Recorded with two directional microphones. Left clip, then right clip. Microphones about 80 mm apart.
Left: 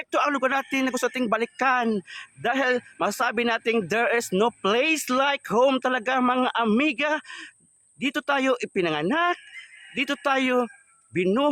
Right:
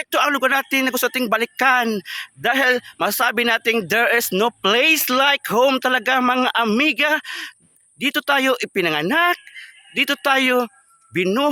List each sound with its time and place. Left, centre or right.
0.0 s speech: right